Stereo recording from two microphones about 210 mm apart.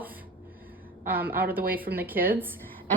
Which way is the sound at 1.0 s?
10° right (ahead or behind).